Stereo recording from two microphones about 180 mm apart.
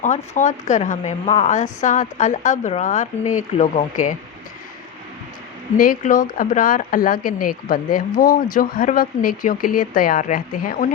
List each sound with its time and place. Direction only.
0.3 s speech: 40° left (ahead or behind)
5.7 s speech: 50° left (ahead or behind)